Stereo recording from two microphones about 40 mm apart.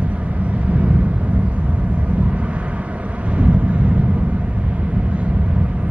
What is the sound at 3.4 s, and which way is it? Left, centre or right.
Wind noise, right.